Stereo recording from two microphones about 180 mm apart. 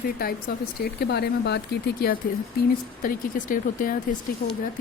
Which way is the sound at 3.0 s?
50° left (ahead or behind).